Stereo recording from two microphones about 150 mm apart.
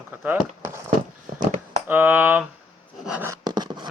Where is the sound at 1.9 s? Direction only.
15° right (ahead or behind).